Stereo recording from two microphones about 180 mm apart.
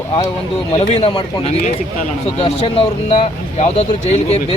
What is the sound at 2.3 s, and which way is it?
Speech, 30° left (ahead or behind).